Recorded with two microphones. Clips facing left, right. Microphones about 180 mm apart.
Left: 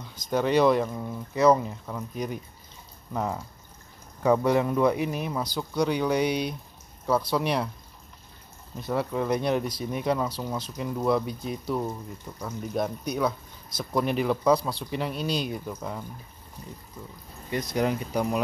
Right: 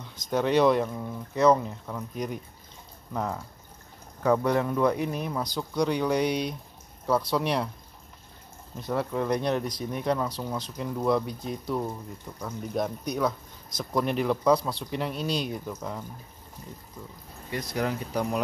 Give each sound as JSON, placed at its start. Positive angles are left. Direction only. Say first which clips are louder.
{"t": 0.1, "sound": "speech", "louder": "left 1 dB", "side_deg": 0}
{"t": 8.8, "sound": "speech", "louder": "left 1 dB", "side_deg": 5}
{"t": 17.5, "sound": "speech", "louder": "left 3 dB", "side_deg": 20}